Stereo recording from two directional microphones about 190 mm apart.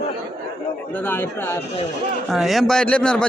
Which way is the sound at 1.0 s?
10° left (ahead or behind).